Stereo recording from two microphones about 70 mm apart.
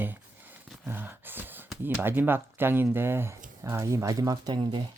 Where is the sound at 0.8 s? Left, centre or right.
Right.